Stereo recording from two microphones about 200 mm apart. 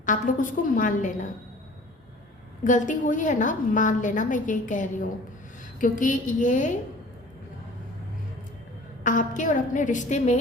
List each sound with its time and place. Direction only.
0.0 s a woman's voice: 40° left (ahead or behind)
2.6 s a woman's voice: 40° left (ahead or behind)
9.0 s a woman's voice: 40° left (ahead or behind)